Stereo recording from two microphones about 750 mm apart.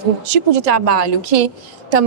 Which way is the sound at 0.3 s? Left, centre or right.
Right.